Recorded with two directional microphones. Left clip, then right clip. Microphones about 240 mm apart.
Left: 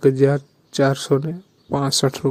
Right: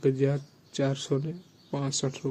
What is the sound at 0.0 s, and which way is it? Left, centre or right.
Speech, left.